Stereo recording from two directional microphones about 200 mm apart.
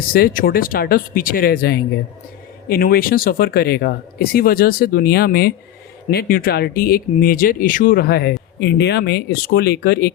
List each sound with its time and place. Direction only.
0.1 s speech: 45° left (ahead or behind)